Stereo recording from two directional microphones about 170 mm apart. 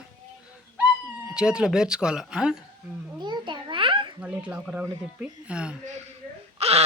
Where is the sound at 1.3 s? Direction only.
5° right (ahead or behind).